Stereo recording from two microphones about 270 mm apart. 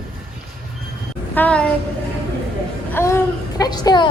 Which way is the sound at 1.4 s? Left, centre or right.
Centre.